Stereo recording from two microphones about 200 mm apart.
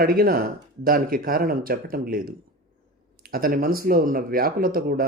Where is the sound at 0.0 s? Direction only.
50° right (ahead or behind).